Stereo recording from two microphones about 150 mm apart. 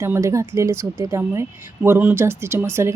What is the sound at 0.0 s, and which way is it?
A woman's voice, 20° right (ahead or behind).